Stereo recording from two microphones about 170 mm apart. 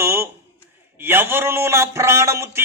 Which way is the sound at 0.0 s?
15° right (ahead or behind).